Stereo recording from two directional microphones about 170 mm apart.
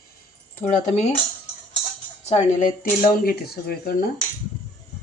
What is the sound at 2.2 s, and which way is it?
Speech, 45° left (ahead or behind).